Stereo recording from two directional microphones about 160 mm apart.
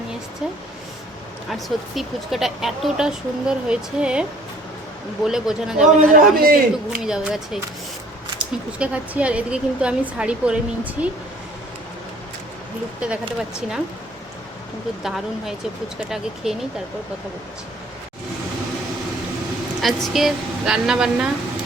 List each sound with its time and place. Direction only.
1.5 s speech: centre (ahead or behind)
6.0 s a man's voice: 60° right (ahead or behind)
6.9 s speech: 5° right (ahead or behind)
15.0 s speech: centre (ahead or behind)
19.8 s speech: centre (ahead or behind)